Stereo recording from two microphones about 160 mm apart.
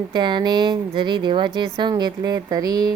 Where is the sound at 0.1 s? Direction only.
30° right (ahead or behind).